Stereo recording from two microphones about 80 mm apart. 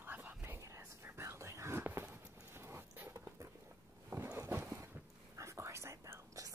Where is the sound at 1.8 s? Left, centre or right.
Right.